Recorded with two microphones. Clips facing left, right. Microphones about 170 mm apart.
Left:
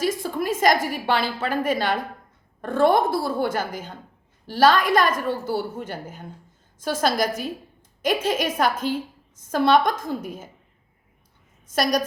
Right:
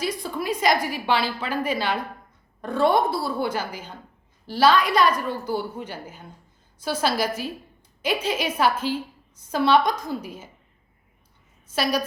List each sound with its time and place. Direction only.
0.0 s a woman's voice: 45° left (ahead or behind)
11.7 s a woman's voice: 45° left (ahead or behind)